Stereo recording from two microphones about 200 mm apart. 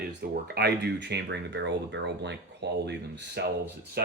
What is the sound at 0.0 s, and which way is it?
Speech, 55° right (ahead or behind).